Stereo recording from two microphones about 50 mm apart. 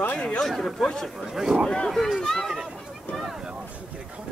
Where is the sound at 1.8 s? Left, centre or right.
Centre.